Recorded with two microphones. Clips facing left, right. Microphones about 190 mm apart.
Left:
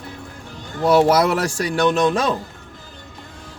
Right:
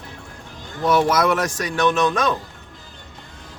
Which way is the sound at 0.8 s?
30° left (ahead or behind).